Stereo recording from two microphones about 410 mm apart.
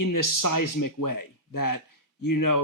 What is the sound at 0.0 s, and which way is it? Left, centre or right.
Speech, left.